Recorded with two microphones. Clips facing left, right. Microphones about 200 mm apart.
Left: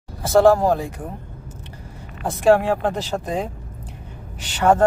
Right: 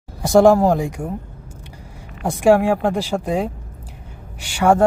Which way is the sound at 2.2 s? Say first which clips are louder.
Right 2 dB; 15° right (ahead or behind).